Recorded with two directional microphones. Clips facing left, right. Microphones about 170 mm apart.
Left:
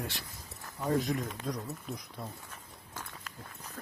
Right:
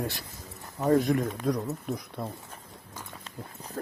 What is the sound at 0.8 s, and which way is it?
Speech, 55° right (ahead or behind).